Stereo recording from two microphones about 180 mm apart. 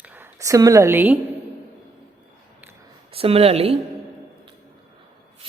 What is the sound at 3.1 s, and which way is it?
Speech, 30° right (ahead or behind).